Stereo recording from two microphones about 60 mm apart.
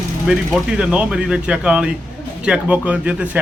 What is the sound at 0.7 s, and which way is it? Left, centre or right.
A man's voice, centre.